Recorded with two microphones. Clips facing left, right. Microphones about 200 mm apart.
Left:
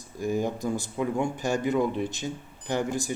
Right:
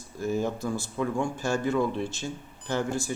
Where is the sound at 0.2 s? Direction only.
15° left (ahead or behind).